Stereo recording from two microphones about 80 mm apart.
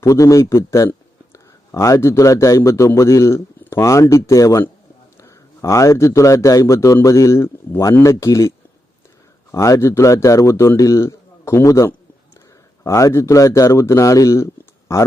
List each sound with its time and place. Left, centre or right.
0.0 s a man's voice: left